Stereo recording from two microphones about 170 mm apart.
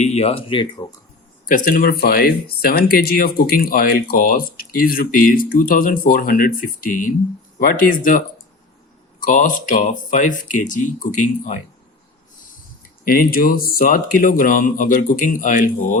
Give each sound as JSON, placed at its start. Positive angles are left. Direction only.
{"t": 0.0, "sound": "speech", "side_deg": 40}
{"t": 1.5, "sound": "speech", "side_deg": 50}
{"t": 9.2, "sound": "speech", "side_deg": 50}
{"t": 13.1, "sound": "speech", "side_deg": 60}